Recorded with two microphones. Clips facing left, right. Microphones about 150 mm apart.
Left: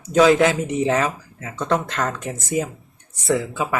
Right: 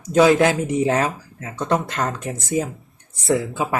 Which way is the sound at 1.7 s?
20° right (ahead or behind).